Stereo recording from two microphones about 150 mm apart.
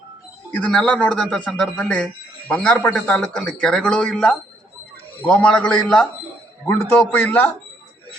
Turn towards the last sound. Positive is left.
turn(degrees=10)  # may be behind; listen again after turning